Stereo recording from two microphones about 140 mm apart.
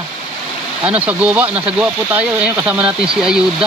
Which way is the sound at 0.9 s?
10° right (ahead or behind).